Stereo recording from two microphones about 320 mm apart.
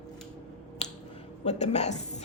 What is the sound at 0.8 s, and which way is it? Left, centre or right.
Finger snapping, left.